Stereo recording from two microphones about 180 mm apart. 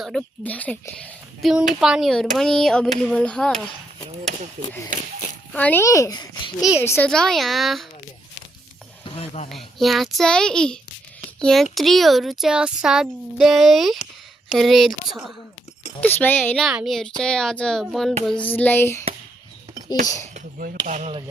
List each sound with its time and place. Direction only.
0.0 s speech: 5° left (ahead or behind)
5.5 s a child's voice: 10° left (ahead or behind)
6.8 s speech: 10° left (ahead or behind)
9.0 s speech: 35° left (ahead or behind)
9.5 s a child's voice: centre (ahead or behind)
16.5 s a child's voice: centre (ahead or behind)
20.3 s speech: 50° right (ahead or behind)